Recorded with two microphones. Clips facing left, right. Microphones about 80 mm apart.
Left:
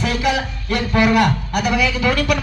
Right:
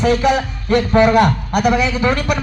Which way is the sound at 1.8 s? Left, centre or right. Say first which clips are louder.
Right 1 dB; right.